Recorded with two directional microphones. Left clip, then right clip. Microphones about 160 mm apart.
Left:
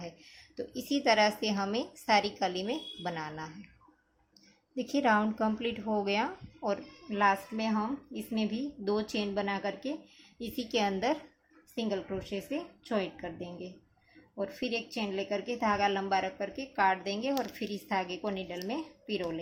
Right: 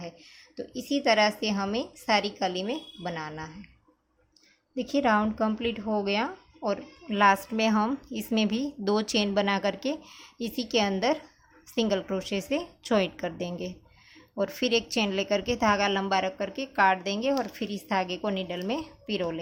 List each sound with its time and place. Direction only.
0.5 s a woman's voice: 15° right (ahead or behind)
4.7 s speech: 20° right (ahead or behind)
7.1 s a woman's voice: 35° right (ahead or behind)
11.7 s a woman's voice: 40° right (ahead or behind)